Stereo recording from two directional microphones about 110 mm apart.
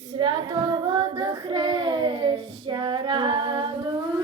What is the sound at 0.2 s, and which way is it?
Female singing, 50° right (ahead or behind).